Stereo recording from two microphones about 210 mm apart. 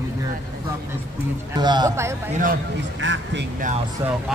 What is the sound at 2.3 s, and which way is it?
Speech, 40° right (ahead or behind).